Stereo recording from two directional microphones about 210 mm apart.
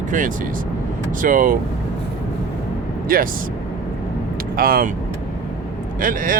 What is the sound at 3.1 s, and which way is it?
Speech, 45° right (ahead or behind).